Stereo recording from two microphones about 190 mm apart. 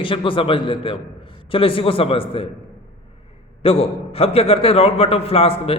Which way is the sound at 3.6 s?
30° left (ahead or behind).